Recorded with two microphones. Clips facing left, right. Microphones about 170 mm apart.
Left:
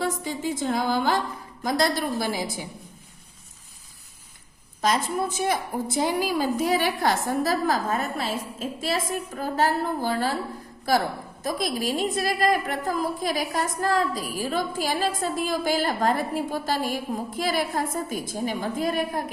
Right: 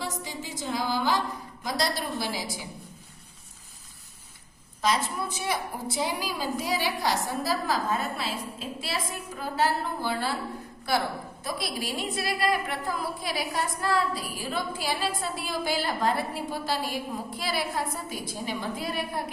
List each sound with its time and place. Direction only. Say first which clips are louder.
0.0 s music: left 8 dB; 55° left (ahead or behind)
1.6 s a woman's voice: left 6 dB; 50° left (ahead or behind)
4.8 s a woman's voice: left 3 dB; 50° left (ahead or behind)
11.4 s a woman's voice: left 7 dB; 45° left (ahead or behind)